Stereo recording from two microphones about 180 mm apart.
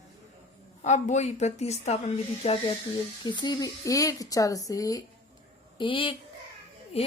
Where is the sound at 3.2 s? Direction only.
25° left (ahead or behind).